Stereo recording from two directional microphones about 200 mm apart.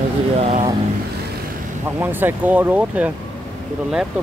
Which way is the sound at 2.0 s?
10° right (ahead or behind).